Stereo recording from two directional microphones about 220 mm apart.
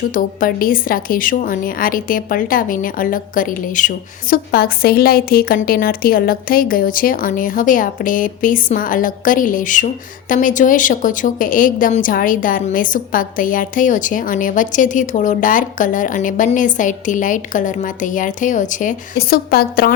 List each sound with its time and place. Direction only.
0.1 s a woman's voice: 40° left (ahead or behind)